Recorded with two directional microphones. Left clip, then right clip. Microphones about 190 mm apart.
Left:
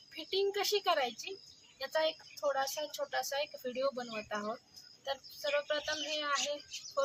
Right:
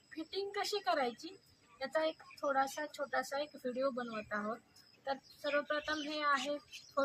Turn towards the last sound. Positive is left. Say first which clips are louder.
# left 1 dB
turn(degrees=30)  # may be behind; listen again after turning